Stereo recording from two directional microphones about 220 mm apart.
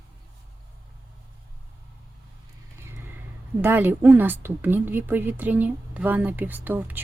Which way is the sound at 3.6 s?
10° right (ahead or behind).